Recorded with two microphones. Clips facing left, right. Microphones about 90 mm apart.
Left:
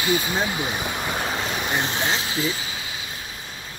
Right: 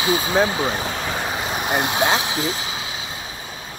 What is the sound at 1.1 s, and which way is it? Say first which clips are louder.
Vehicle: right 1 dB; 5° right (ahead or behind).